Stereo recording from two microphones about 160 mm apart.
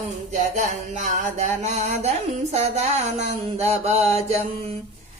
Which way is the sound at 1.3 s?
45° right (ahead or behind).